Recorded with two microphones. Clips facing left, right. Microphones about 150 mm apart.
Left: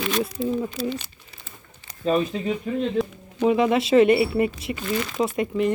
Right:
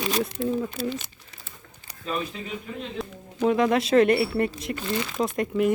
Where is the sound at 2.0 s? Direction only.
35° left (ahead or behind).